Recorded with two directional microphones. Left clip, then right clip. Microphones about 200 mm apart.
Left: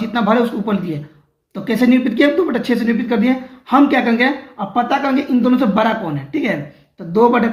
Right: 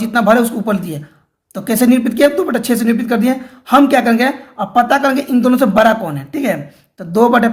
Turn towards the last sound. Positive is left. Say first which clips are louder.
# right 2 dB
turn(degrees=-50)  # may be behind; listen again after turning